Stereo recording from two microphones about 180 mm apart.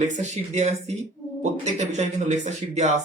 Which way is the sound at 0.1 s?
40° right (ahead or behind).